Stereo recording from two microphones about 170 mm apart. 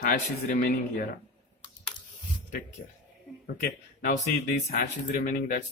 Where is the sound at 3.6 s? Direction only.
45° left (ahead or behind).